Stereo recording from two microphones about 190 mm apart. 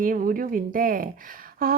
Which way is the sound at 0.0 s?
45° right (ahead or behind).